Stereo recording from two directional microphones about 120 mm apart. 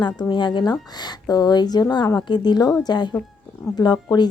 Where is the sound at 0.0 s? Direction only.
40° left (ahead or behind).